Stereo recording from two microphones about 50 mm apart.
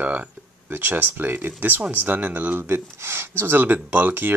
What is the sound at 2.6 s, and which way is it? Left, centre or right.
Speech, right.